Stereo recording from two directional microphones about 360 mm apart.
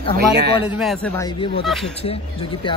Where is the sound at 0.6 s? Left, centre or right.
Centre.